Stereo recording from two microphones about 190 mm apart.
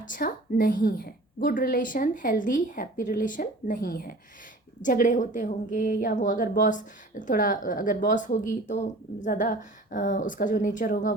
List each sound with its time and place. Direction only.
0.0 s a woman's voice: 45° left (ahead or behind)